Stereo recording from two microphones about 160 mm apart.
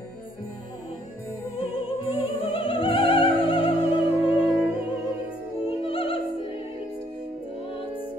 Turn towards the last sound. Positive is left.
turn(degrees=35)  # may be behind; listen again after turning